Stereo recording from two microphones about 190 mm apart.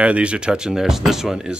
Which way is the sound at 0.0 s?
5° right (ahead or behind).